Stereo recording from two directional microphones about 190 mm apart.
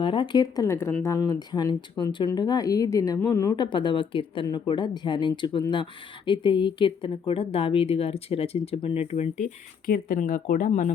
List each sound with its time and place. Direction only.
0.0 s speech: 25° left (ahead or behind)
9.8 s speech: 50° left (ahead or behind)